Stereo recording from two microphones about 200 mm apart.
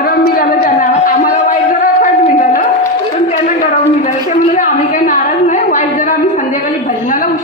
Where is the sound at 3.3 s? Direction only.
40° left (ahead or behind).